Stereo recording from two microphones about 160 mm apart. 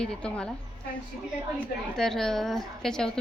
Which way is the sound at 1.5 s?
5° left (ahead or behind).